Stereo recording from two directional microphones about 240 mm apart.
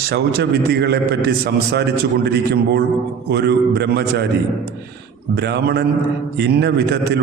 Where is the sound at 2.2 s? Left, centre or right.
Right.